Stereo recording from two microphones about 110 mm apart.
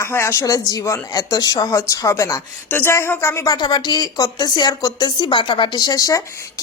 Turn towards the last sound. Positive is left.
turn(degrees=30)  # may be behind; listen again after turning